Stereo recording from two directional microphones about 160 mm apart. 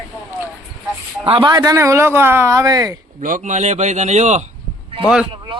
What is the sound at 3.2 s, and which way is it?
A man's voice, 50° right (ahead or behind).